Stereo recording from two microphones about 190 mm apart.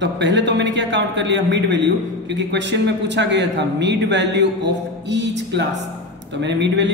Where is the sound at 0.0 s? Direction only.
70° right (ahead or behind).